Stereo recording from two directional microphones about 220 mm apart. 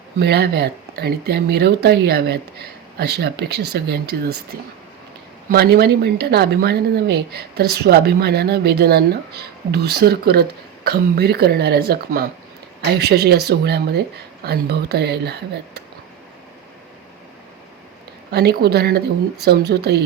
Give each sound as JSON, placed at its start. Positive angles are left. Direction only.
{"t": 0.2, "sound": "speech", "side_deg": -50}
{"t": 5.5, "sound": "speech", "side_deg": -45}
{"t": 18.3, "sound": "speech", "side_deg": -45}